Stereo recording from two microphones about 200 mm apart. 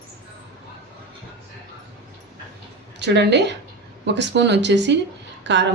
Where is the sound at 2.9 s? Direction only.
60° right (ahead or behind).